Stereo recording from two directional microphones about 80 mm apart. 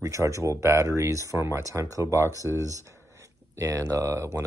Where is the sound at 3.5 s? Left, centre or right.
Right.